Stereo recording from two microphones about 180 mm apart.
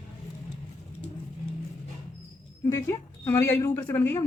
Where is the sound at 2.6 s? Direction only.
15° left (ahead or behind).